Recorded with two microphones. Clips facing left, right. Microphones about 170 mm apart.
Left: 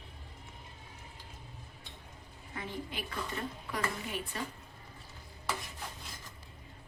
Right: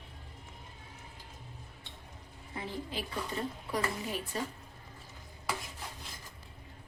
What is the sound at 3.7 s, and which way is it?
Speech, 35° right (ahead or behind).